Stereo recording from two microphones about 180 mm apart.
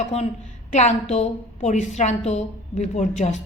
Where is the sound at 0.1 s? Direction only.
35° left (ahead or behind).